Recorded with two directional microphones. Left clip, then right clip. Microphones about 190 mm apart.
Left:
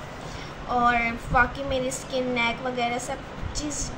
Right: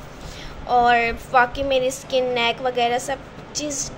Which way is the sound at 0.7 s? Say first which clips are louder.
Right 6 dB; 45° right (ahead or behind).